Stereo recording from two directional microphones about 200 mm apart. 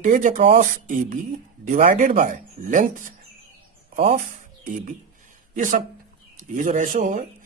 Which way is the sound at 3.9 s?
40° right (ahead or behind).